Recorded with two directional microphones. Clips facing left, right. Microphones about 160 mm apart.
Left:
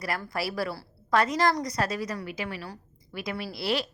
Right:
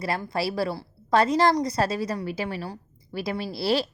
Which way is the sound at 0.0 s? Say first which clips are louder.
Right 4 dB; 25° right (ahead or behind).